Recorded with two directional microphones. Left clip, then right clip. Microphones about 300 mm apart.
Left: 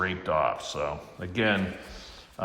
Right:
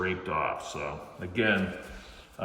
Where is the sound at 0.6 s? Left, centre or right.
Left.